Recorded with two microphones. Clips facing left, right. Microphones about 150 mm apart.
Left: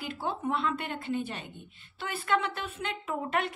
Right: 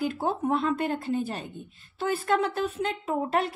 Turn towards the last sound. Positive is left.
turn(degrees=-35)  # may be behind; listen again after turning